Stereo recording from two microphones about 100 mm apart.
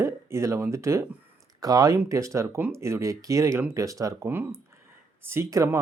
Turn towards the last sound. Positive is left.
turn(degrees=-30)  # may be behind; listen again after turning